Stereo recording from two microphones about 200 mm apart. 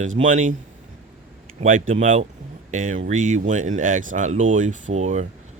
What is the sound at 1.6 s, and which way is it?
Speech, 40° right (ahead or behind).